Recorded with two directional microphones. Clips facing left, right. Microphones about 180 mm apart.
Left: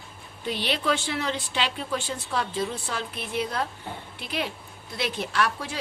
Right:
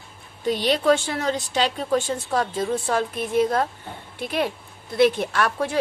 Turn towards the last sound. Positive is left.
turn(degrees=-50)  # may be behind; listen again after turning